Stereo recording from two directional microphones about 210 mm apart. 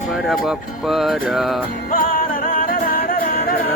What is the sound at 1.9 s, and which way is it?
Music, 40° left (ahead or behind).